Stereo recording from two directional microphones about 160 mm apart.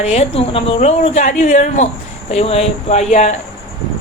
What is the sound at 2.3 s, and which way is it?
A woman's voice, 40° left (ahead or behind).